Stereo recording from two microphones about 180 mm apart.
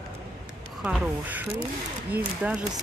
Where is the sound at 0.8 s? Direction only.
5° right (ahead or behind).